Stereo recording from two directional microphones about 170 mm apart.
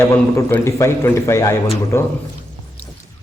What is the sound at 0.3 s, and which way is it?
A man's voice, 15° left (ahead or behind).